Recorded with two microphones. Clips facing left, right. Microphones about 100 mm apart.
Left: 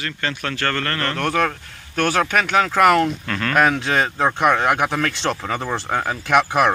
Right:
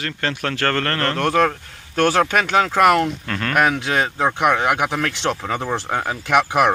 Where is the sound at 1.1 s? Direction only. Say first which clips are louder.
Right 4 dB; 30° right (ahead or behind).